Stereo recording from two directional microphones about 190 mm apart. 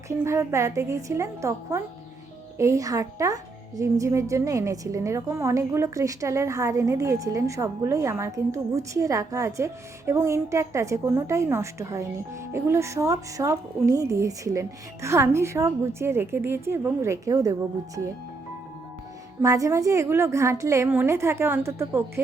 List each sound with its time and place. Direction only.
0.1 s speech: 15° right (ahead or behind)
19.4 s speech: 15° right (ahead or behind)